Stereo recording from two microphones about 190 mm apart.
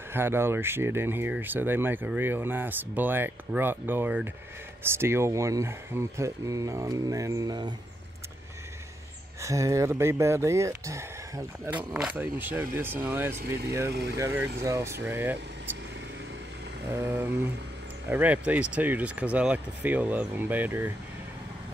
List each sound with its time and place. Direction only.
0.1 s speech: 10° right (ahead or behind)
9.4 s speech: 15° right (ahead or behind)
16.9 s speech: 10° right (ahead or behind)